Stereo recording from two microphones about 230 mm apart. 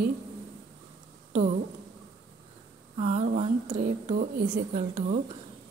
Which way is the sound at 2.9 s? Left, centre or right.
Right.